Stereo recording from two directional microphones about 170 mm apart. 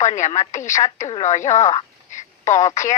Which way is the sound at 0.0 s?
45° left (ahead or behind).